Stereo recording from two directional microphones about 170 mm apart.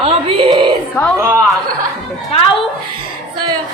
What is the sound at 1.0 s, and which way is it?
Speech, 20° left (ahead or behind).